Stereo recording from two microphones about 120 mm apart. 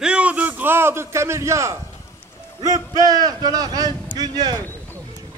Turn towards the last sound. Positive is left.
turn(degrees=-30)  # may be behind; listen again after turning